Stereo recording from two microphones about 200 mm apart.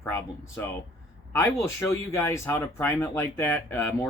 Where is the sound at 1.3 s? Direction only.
15° left (ahead or behind).